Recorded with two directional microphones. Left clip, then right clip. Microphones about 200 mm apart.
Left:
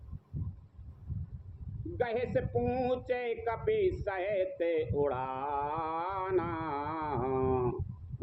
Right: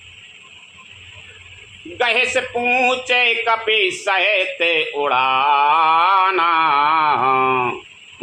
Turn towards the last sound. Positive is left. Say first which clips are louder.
# right 16 dB
turn(degrees=-60)  # may be behind; listen again after turning